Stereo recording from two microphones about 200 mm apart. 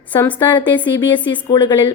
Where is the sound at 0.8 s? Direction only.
25° left (ahead or behind).